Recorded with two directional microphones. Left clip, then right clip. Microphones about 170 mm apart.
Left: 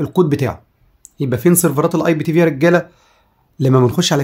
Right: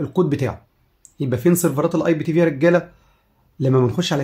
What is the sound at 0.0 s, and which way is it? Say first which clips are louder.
Speech: left 4 dB; 30° left (ahead or behind).